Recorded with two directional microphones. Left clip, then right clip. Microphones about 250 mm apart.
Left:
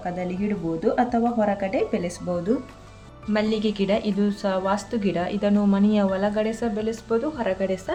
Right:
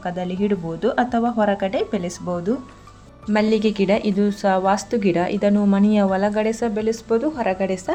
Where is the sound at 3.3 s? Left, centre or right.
Right.